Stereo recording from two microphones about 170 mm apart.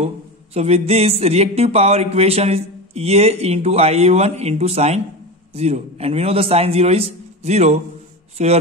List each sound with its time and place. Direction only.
0.6 s speech: 40° right (ahead or behind)